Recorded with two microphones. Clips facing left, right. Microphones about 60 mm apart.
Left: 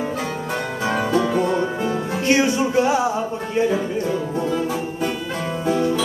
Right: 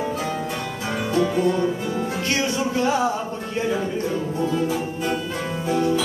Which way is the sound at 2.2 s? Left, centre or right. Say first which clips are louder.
Left 8 dB; left.